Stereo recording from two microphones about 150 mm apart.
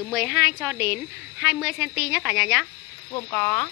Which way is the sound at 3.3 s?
15° left (ahead or behind).